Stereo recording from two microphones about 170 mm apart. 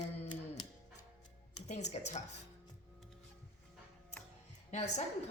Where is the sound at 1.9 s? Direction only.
45° left (ahead or behind).